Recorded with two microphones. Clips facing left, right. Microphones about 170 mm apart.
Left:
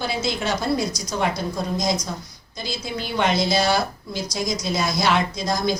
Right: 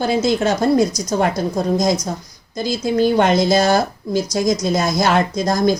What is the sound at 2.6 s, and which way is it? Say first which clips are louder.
A woman's voice: right 12 dB; 45° right (ahead or behind).